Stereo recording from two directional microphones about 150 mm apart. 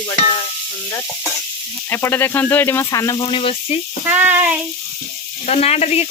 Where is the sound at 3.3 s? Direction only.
35° left (ahead or behind).